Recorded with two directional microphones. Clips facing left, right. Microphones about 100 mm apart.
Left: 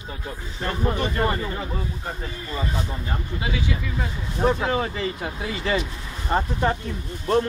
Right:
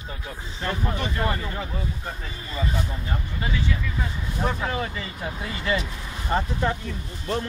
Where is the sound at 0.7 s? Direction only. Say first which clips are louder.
Left 3 dB; 20° left (ahead or behind).